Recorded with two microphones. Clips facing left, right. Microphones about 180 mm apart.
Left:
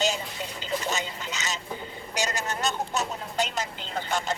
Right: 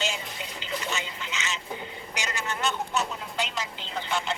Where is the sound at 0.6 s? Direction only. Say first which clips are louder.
Left 3 dB; 40° left (ahead or behind).